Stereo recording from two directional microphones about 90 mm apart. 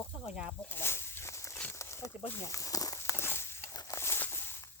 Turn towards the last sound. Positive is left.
turn(degrees=25)  # may be behind; listen again after turning